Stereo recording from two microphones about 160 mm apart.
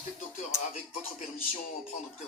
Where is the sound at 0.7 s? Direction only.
40° left (ahead or behind).